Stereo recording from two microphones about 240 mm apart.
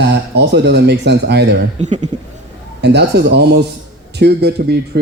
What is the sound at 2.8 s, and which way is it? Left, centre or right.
Speech, right.